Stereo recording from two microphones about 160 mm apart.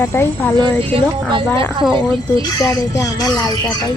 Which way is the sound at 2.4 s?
20° left (ahead or behind).